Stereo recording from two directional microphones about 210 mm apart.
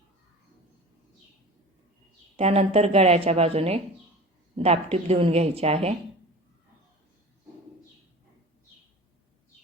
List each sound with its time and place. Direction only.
2.3 s a woman's voice: 30° right (ahead or behind)